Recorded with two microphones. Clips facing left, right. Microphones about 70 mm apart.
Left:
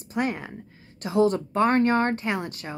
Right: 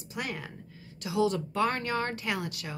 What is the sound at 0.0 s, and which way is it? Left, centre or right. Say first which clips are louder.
Speech: left 9 dB; left.